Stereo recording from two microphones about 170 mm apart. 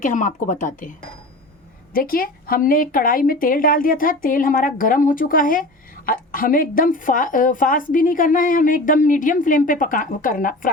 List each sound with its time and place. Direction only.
0.0 s a woman's voice: 50° left (ahead or behind)